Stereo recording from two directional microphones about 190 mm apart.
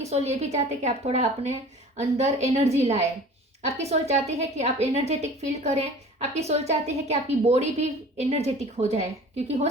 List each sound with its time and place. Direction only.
0.0 s a woman's voice: 35° right (ahead or behind)